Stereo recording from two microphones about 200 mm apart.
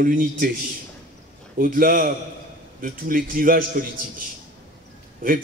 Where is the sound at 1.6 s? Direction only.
45° right (ahead or behind).